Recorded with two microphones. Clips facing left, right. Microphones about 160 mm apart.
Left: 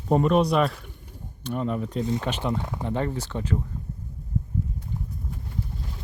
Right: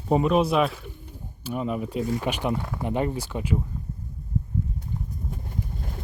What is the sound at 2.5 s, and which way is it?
Speech, 20° left (ahead or behind).